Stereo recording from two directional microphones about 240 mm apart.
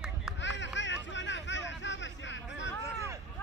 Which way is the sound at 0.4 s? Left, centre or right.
Left.